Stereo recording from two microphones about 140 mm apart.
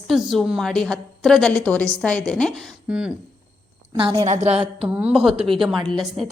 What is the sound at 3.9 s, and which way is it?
Speech, 35° right (ahead or behind).